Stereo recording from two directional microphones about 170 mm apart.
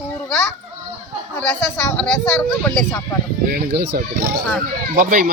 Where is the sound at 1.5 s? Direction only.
5° left (ahead or behind).